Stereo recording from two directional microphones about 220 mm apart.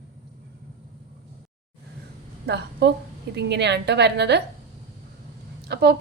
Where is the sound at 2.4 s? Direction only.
50° right (ahead or behind).